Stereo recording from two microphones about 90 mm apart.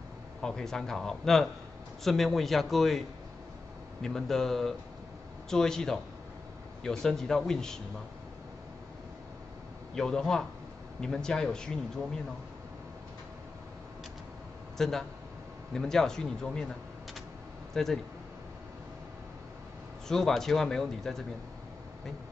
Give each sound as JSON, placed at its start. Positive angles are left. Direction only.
{"t": 0.4, "sound": "speech", "side_deg": 5}
{"t": 4.0, "sound": "speech", "side_deg": 5}
{"t": 9.9, "sound": "speech", "side_deg": 5}
{"t": 14.8, "sound": "speech", "side_deg": 5}
{"t": 20.1, "sound": "speech", "side_deg": 5}